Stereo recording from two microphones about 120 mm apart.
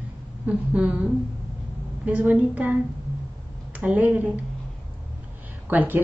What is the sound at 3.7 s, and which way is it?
Speech, 15° right (ahead or behind).